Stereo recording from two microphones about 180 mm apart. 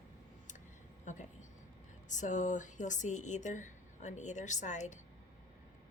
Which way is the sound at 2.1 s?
40° left (ahead or behind).